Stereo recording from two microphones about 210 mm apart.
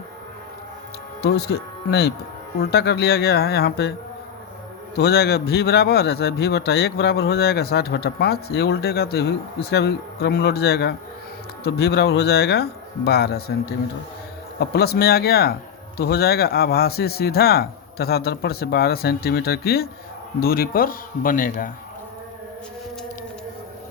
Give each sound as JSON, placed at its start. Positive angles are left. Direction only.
{"t": 1.2, "sound": "a man's voice", "side_deg": 50}
{"t": 4.9, "sound": "a man's voice", "side_deg": 50}
{"t": 14.6, "sound": "a man's voice", "side_deg": 50}